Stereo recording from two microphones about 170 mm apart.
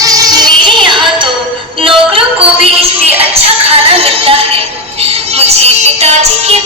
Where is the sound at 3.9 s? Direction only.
35° right (ahead or behind).